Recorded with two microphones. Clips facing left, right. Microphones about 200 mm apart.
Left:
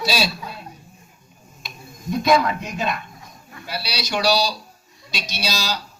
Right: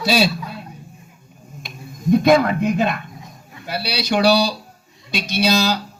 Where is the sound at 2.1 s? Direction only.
55° right (ahead or behind).